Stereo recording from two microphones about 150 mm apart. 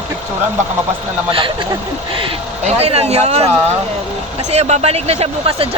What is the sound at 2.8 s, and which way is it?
Speech, 45° right (ahead or behind).